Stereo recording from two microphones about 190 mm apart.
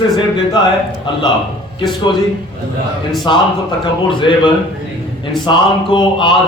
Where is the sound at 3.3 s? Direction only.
25° left (ahead or behind).